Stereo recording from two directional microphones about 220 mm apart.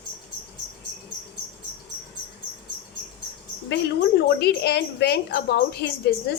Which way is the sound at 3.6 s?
55° left (ahead or behind).